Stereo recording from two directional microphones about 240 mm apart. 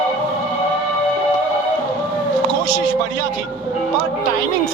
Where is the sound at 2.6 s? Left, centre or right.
Right.